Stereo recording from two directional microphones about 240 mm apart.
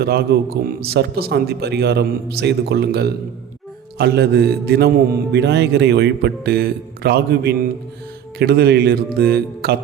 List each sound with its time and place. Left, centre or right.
0.0 s a man's voice: right